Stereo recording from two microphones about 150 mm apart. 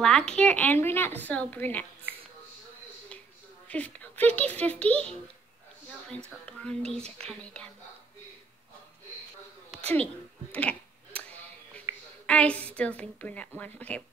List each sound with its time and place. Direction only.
0.0 s speech: 5° left (ahead or behind)
3.6 s a sound: 10° left (ahead or behind)
4.4 s speech: 10° left (ahead or behind)
6.4 s speech: 5° left (ahead or behind)
7.0 s speech: 45° right (ahead or behind)
7.2 s speech: 5° left (ahead or behind)
10.5 s a sound: 10° left (ahead or behind)
12.3 s speech: 10° left (ahead or behind)